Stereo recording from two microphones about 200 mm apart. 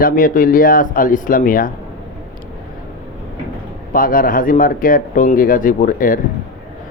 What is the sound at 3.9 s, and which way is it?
Speech, 45° left (ahead or behind).